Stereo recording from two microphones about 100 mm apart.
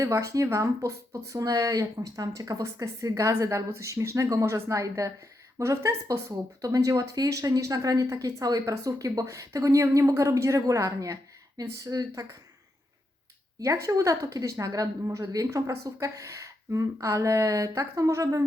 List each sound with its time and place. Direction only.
0.0 s speech: 30° right (ahead or behind)
13.6 s speech: 35° right (ahead or behind)